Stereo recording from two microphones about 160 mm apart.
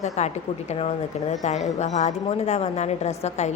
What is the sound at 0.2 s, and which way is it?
A woman's voice, 45° left (ahead or behind).